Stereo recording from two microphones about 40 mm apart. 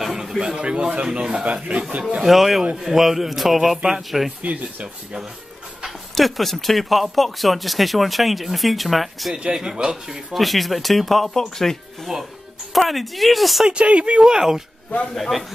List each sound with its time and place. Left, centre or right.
0.0 s a sound: centre
0.6 s speech: right
1.4 s a man's voice: right
2.2 s speech: centre
4.4 s a man's voice: right
5.9 s speech: centre
9.3 s speech: centre
10.3 s speech: centre
13.7 s speech: right
14.2 s speech: centre
15.1 s speech: centre